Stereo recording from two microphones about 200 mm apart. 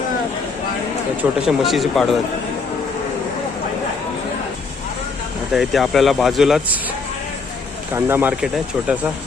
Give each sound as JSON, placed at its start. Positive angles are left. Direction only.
{"t": 1.2, "sound": "speech", "side_deg": -5}
{"t": 5.5, "sound": "speech", "side_deg": 0}
{"t": 7.9, "sound": "speech", "side_deg": -10}